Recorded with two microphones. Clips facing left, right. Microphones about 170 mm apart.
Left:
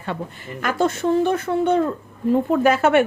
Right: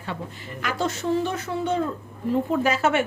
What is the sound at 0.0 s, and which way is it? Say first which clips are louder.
A woman's voice: left 4 dB; 55° left (ahead or behind).